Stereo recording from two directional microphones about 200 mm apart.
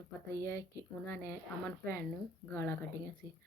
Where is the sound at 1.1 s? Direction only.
10° left (ahead or behind).